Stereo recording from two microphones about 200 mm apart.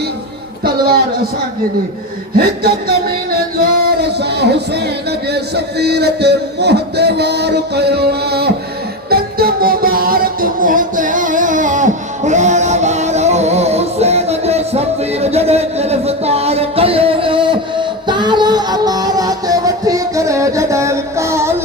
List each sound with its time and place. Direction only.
2.4 s speech: 50° right (ahead or behind)
3.6 s music: 55° right (ahead or behind)
5.3 s a man's voice: 55° right (ahead or behind)
9.0 s music: 50° right (ahead or behind); by 21.5 s 15° right (ahead or behind)